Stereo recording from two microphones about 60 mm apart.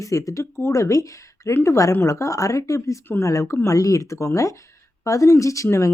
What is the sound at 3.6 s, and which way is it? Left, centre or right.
Speech, left.